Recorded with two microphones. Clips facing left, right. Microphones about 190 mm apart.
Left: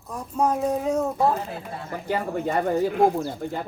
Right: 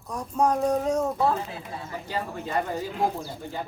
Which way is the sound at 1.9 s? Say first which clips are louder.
Left 6 dB; 55° left (ahead or behind).